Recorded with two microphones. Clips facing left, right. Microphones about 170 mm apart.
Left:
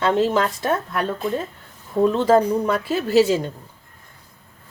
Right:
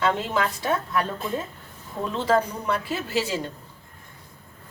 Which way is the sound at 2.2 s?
45° left (ahead or behind).